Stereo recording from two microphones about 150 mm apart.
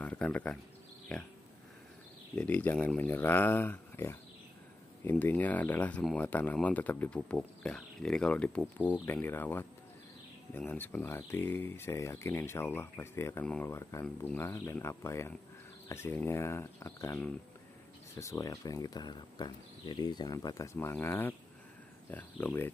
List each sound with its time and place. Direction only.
0.0 s speech: 10° left (ahead or behind)
2.3 s speech: 10° left (ahead or behind)
5.2 s speech: 10° left (ahead or behind)